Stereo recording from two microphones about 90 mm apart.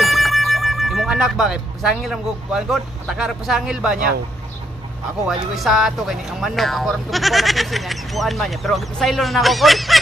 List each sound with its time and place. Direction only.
0.0 s speech: centre (ahead or behind)
5.5 s speech: centre (ahead or behind)